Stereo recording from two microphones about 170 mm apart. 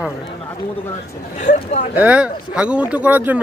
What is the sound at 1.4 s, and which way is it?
Speech, 45° left (ahead or behind).